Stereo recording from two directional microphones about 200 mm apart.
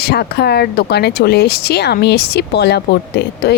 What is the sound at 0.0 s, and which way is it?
A woman's voice, 55° left (ahead or behind).